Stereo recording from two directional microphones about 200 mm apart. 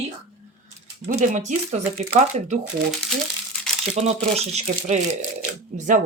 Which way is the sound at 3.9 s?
35° right (ahead or behind).